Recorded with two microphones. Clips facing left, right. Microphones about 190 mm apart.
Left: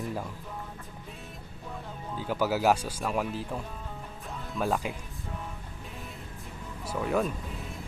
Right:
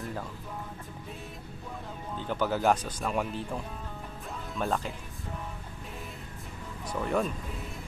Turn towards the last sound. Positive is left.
turn(degrees=0)  # may be behind; listen again after turning